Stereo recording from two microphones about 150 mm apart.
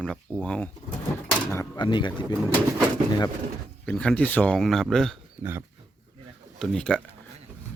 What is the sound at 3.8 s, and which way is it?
Speech, 5° left (ahead or behind).